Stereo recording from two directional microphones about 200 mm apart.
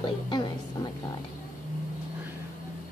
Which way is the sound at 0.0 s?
20° left (ahead or behind).